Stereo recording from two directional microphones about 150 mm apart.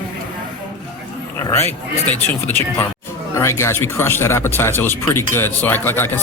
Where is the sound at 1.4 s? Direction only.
15° left (ahead or behind).